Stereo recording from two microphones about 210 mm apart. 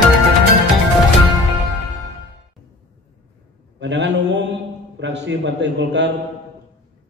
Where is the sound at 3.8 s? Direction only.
55° right (ahead or behind).